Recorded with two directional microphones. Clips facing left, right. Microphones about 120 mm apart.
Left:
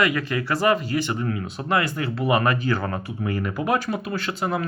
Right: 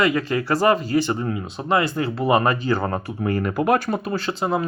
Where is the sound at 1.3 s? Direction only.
20° right (ahead or behind).